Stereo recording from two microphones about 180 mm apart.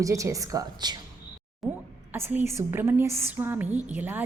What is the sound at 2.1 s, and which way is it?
A woman's voice, 10° right (ahead or behind).